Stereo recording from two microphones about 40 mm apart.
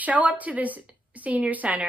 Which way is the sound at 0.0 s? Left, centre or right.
Right.